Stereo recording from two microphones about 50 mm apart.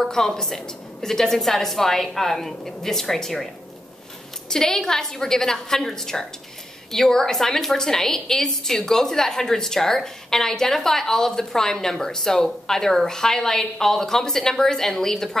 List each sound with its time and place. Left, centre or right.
0.0 s a woman's voice: centre
4.5 s a woman's voice: centre